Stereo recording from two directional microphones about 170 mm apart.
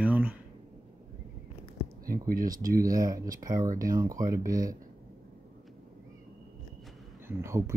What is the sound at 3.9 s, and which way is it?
Speech, 20° right (ahead or behind).